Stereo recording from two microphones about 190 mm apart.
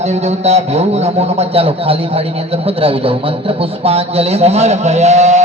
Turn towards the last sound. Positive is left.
turn(degrees=-35)  # may be behind; listen again after turning